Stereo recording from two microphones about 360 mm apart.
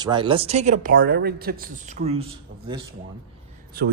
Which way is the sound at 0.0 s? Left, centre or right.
Centre.